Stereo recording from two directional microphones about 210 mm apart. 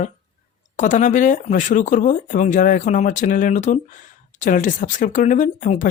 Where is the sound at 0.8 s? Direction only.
35° left (ahead or behind).